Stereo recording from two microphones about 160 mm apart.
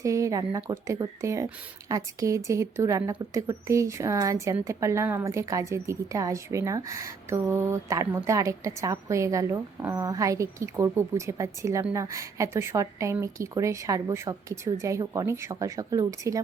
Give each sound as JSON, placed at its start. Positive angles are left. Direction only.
{"t": 0.0, "sound": "a woman's voice", "side_deg": -20}